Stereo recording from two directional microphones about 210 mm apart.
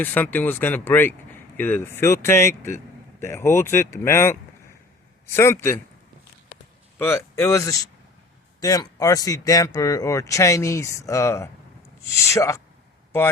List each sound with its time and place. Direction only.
0.0 s speech: 10° left (ahead or behind)
5.4 s speech: 10° left (ahead or behind)
7.0 s speech: 10° left (ahead or behind)